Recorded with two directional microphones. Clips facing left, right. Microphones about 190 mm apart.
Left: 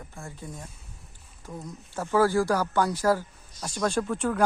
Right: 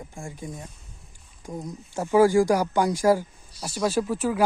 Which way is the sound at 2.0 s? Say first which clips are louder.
Right 5 dB; 15° right (ahead or behind).